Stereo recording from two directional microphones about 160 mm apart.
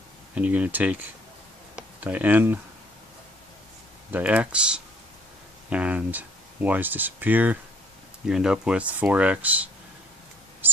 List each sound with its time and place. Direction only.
0.3 s speech: 10° right (ahead or behind)
4.1 s speech: 10° right (ahead or behind)